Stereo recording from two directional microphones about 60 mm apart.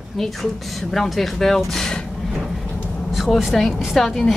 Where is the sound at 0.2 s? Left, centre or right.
Centre.